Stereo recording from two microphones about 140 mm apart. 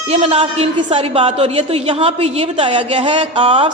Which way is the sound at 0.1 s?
45° right (ahead or behind).